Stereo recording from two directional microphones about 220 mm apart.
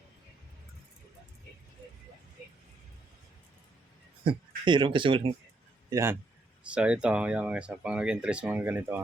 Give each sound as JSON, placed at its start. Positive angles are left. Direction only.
{"t": 4.2, "sound": "a man's voice", "side_deg": -20}